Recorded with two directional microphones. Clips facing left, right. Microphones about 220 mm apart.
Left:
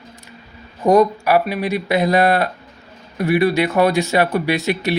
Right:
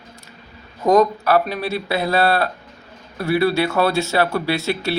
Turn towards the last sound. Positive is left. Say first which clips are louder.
# left 2 dB
turn(degrees=15)  # may be behind; listen again after turning